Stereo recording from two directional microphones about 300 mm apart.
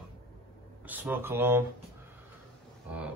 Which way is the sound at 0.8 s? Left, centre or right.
Centre.